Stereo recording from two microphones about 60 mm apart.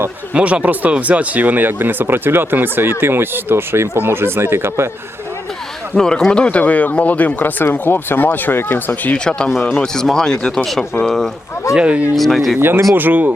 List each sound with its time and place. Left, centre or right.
0.3 s speech: right
5.9 s speech: centre; by 9.0 s left
9.1 s speech: centre
11.7 s speech: centre
12.1 s speech: centre
12.5 s speech: right